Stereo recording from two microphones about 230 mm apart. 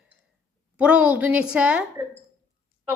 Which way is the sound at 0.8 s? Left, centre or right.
Centre.